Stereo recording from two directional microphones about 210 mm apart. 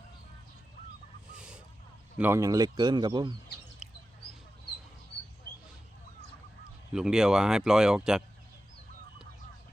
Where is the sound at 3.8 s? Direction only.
5° right (ahead or behind).